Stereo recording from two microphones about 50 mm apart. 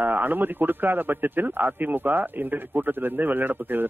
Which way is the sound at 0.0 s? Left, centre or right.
Right.